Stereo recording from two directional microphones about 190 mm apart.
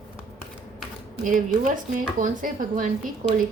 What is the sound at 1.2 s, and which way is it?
A woman's voice, 45° right (ahead or behind).